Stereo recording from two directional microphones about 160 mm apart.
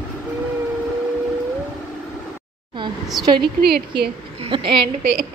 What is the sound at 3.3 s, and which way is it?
Speech, 90° right.